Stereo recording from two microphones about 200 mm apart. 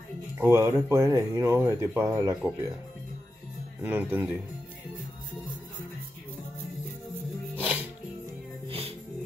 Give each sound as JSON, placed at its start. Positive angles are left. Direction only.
{"t": 0.4, "sound": "speech", "side_deg": -15}
{"t": 3.8, "sound": "speech", "side_deg": -10}
{"t": 7.5, "sound": "music", "side_deg": -5}
{"t": 8.6, "sound": "music", "side_deg": -30}